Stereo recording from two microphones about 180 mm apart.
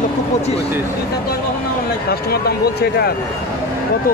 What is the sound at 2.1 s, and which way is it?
Speech, 60° left (ahead or behind).